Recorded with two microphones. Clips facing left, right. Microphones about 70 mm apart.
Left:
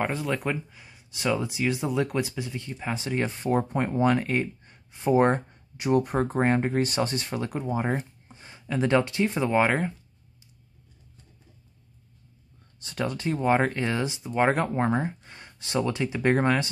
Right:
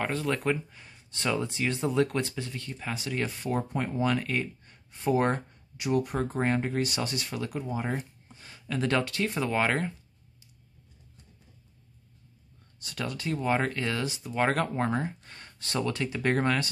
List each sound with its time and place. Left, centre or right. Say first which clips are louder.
0.0 s speech: left 1 dB; centre
12.8 s speech: left 5 dB; left